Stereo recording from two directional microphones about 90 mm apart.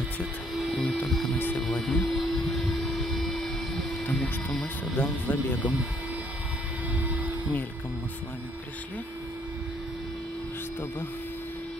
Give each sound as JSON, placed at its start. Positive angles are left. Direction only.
{"t": 0.7, "sound": "music", "side_deg": 10}
{"t": 1.6, "sound": "printer", "side_deg": 0}
{"t": 2.1, "sound": "a sound", "side_deg": 0}
{"t": 4.1, "sound": "speech", "side_deg": 15}